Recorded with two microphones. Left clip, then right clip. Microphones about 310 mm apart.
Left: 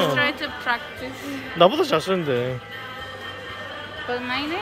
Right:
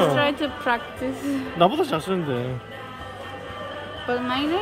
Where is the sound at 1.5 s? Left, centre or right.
Centre.